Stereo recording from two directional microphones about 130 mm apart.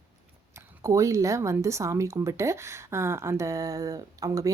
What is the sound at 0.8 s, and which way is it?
Speech, 25° right (ahead or behind).